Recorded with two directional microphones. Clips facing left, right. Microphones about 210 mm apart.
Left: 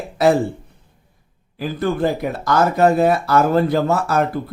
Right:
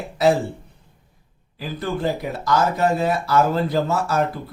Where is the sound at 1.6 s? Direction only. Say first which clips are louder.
Left 5 dB; 55° left (ahead or behind).